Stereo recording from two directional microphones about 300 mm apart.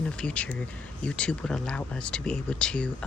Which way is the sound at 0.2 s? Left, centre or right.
Centre.